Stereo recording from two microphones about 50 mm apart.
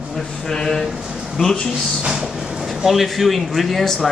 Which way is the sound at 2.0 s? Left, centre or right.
Centre.